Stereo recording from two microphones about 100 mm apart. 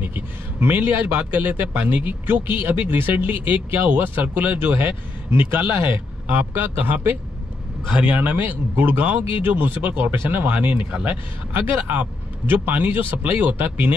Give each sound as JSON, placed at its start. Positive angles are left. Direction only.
{"t": 0.0, "sound": "a man's voice", "side_deg": -20}
{"t": 11.5, "sound": "a man's voice", "side_deg": -20}